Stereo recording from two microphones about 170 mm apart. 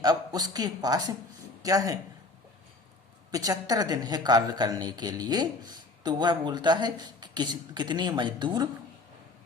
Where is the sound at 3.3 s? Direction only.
20° right (ahead or behind).